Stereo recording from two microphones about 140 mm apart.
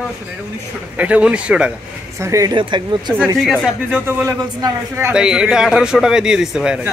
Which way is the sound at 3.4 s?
Centre (ahead or behind).